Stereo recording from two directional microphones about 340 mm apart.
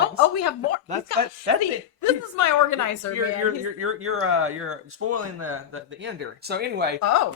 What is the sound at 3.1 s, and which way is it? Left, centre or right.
Speech, right.